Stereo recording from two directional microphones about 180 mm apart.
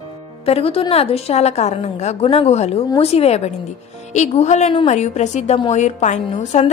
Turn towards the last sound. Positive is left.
turn(degrees=40)  # may be behind; listen again after turning